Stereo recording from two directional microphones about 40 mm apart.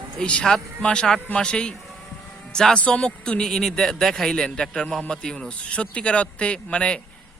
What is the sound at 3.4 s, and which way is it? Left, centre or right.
A man's voice, centre.